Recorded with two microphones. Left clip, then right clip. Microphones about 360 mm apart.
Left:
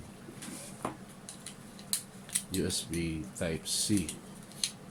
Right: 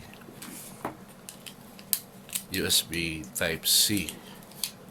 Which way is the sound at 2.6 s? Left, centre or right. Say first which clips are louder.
Right 9 dB; right.